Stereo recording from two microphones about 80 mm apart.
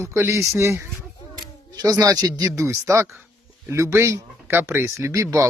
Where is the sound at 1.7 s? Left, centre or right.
Right.